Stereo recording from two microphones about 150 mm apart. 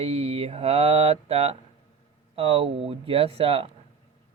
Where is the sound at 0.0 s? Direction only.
45° right (ahead or behind).